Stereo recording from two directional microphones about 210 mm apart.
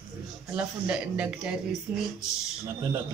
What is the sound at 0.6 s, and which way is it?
Speech, 5° right (ahead or behind).